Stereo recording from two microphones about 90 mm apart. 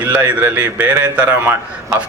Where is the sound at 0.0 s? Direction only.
20° right (ahead or behind).